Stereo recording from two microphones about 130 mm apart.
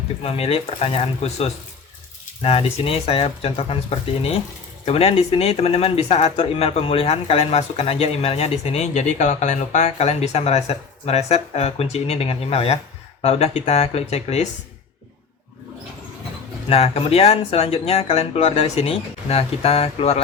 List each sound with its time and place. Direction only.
0.2 s speech: 50° left (ahead or behind)
16.6 s speech: 50° left (ahead or behind)